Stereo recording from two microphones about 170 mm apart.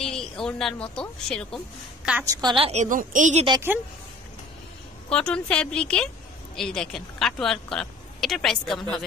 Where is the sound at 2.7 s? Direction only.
45° right (ahead or behind).